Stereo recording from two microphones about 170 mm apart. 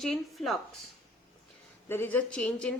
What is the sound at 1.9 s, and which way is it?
Speech, 10° left (ahead or behind).